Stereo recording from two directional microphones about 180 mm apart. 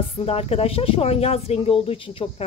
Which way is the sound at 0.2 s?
35° left (ahead or behind).